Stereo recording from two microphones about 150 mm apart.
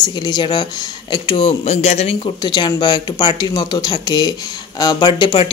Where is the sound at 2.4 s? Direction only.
30° left (ahead or behind).